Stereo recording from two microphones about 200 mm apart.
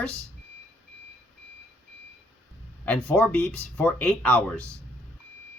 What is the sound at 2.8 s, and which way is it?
Speech, 5° left (ahead or behind).